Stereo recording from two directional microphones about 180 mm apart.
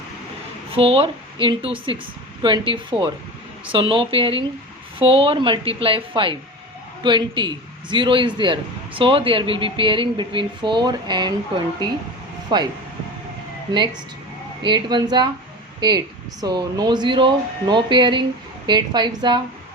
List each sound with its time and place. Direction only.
0.8 s a man's voice: 30° right (ahead or behind)
14.6 s a man's voice: 25° right (ahead or behind)